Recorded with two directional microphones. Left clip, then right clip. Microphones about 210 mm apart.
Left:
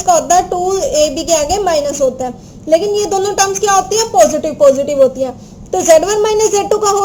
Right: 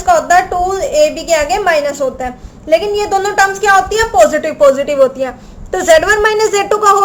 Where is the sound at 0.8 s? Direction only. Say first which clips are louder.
Right 2 dB; 25° right (ahead or behind).